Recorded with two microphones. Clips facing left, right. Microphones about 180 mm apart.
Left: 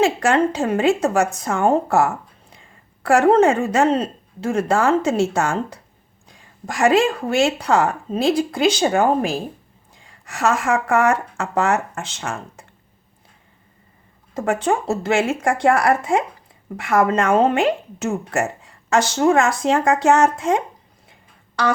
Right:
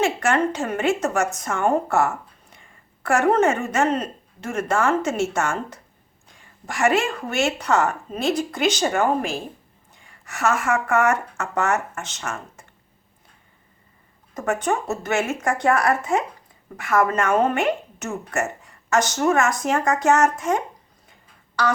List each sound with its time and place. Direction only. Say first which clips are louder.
0.0 s speech: left 4 dB; 35° left (ahead or behind)
14.3 s speech: left 3 dB; 30° left (ahead or behind)